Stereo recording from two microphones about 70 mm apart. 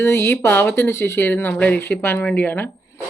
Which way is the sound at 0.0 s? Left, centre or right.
Left.